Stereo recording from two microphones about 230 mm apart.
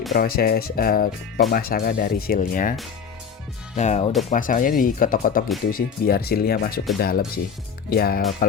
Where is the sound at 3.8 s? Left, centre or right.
Left.